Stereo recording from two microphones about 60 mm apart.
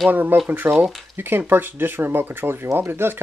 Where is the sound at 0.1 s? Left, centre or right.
Right.